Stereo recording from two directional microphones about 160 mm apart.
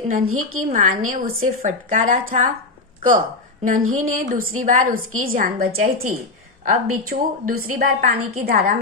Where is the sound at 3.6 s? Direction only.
55° right (ahead or behind).